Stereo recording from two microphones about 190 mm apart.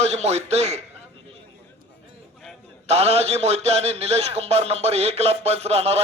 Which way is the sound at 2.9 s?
35° right (ahead or behind).